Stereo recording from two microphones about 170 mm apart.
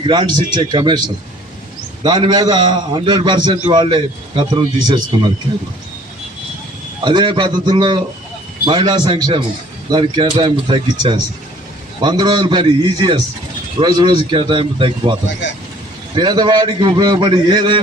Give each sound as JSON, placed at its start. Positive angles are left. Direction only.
{"t": 0.0, "sound": "a man's voice", "side_deg": -25}
{"t": 7.0, "sound": "a man's voice", "side_deg": -25}
{"t": 16.1, "sound": "a man's voice", "side_deg": -25}